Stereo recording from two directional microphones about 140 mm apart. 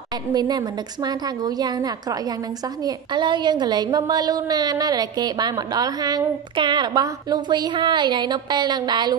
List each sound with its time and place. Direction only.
0.3 s a woman's voice: 30° right (ahead or behind)